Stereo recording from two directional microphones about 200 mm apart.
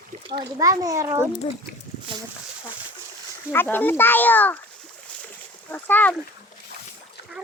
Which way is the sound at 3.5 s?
10° left (ahead or behind).